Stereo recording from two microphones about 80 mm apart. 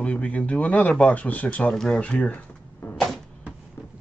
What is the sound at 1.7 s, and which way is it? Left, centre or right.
Speech, centre.